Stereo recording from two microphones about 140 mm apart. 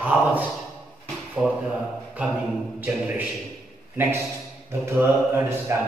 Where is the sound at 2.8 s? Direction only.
10° right (ahead or behind).